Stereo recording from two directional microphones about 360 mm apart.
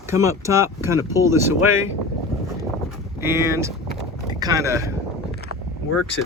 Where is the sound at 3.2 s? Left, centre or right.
Centre.